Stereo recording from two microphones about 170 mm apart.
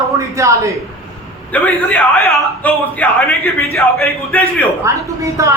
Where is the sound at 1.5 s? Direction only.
10° left (ahead or behind).